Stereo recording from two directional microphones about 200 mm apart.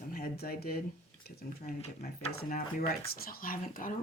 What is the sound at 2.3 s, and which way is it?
Speech, 45° left (ahead or behind).